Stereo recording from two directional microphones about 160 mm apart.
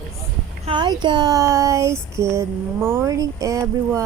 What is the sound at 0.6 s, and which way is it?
Speech, 30° right (ahead or behind).